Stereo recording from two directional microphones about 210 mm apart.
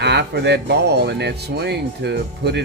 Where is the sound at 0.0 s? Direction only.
55° right (ahead or behind).